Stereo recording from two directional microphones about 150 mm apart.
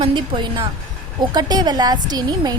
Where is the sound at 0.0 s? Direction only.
30° right (ahead or behind).